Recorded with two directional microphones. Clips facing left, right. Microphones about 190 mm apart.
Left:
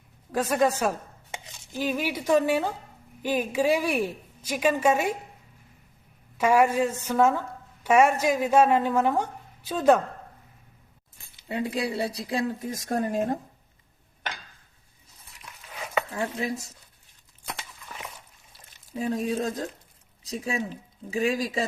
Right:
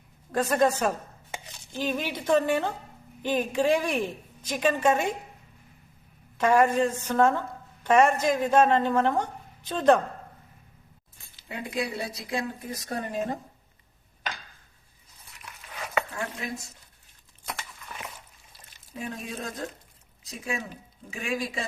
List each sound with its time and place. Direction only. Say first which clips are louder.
0.3 s a woman's voice: even; 10° left (ahead or behind)
6.3 s a woman's voice: even; 10° left (ahead or behind)
11.4 s speech: left 3 dB; 35° left (ahead or behind)
16.4 s speech: left 8 dB; 35° left (ahead or behind)
18.9 s speech: left 9 dB; 35° left (ahead or behind)